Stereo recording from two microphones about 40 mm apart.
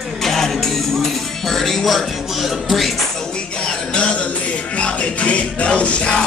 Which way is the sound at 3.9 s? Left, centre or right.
Left.